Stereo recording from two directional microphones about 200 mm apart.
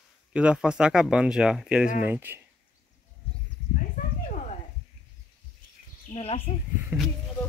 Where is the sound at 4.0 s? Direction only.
40° left (ahead or behind).